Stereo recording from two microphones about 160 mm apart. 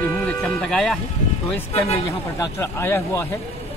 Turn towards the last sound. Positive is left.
turn(degrees=15)  # may be behind; listen again after turning